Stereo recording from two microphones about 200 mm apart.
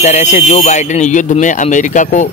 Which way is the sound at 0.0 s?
35° left (ahead or behind).